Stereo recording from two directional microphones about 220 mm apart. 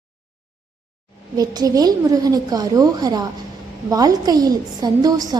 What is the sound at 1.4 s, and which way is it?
A woman's voice, 15° right (ahead or behind).